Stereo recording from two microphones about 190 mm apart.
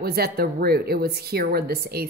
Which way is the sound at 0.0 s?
55° right (ahead or behind).